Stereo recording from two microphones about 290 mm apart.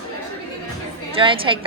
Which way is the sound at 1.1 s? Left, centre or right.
Centre.